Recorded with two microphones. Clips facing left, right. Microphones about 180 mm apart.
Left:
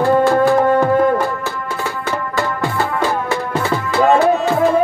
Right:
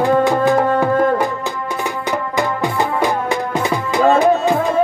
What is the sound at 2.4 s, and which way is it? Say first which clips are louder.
Music: right 1 dB; 15° right (ahead or behind).